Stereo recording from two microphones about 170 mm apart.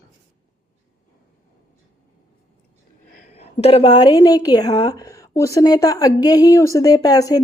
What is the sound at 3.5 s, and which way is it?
Speech, 35° left (ahead or behind).